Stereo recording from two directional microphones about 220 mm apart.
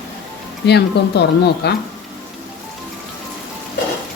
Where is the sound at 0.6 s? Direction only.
50° left (ahead or behind).